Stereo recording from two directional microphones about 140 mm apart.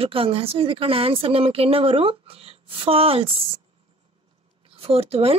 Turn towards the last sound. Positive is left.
turn(degrees=-45)  # may be behind; listen again after turning